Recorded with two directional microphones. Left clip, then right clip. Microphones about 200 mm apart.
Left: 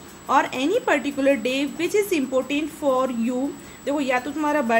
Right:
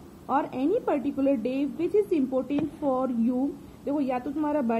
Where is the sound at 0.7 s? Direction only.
30° left (ahead or behind).